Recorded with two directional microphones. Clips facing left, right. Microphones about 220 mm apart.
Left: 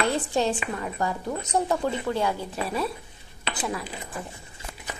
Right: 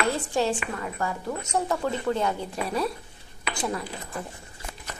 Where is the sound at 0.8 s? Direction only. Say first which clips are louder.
Left 2 dB; 20° left (ahead or behind).